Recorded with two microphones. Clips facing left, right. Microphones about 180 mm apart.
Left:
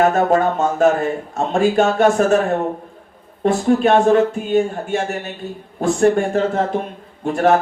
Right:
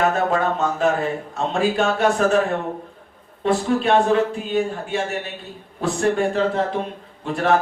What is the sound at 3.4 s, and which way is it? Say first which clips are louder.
A man's voice: left 4 dB; 45° left (ahead or behind).